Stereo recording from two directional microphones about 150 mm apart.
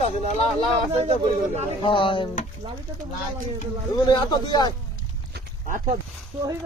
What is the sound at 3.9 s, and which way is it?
Speech, 30° left (ahead or behind).